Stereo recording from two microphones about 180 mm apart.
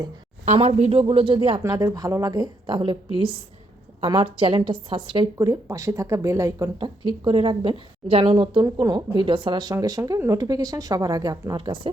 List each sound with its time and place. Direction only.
0.4 s a woman's voice: 35° right (ahead or behind)